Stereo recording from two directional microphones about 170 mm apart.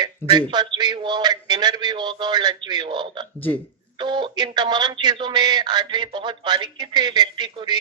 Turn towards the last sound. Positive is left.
turn(degrees=-25)  # may be behind; listen again after turning